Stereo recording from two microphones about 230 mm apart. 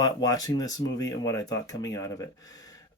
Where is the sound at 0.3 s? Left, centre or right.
Centre.